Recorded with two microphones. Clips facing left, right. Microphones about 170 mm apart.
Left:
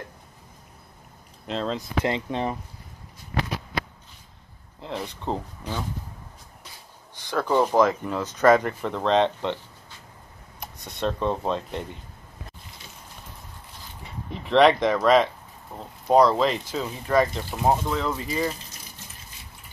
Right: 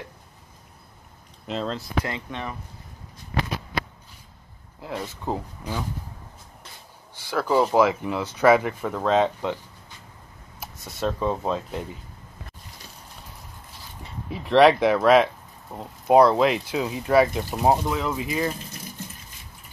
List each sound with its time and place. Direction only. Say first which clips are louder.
1.5 s speech: left 1 dB; 5° right (ahead or behind)
2.0 s speech: left 6 dB; 30° left (ahead or behind)
4.8 s speech: even; 5° right (ahead or behind)
7.2 s speech: right 1 dB; 10° right (ahead or behind)
10.6 s speech: even; centre (ahead or behind)
14.3 s speech: right 1 dB; centre (ahead or behind)